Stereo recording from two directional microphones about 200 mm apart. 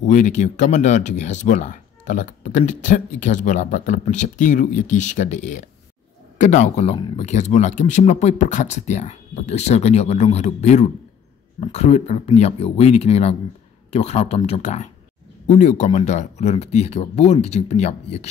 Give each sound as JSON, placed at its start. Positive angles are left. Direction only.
{"t": 0.0, "sound": "speech", "side_deg": 35}